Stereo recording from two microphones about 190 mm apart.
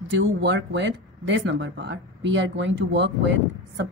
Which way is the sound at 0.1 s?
70° right (ahead or behind).